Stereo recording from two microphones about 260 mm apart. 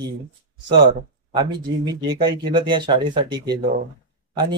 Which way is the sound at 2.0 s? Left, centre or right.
Centre.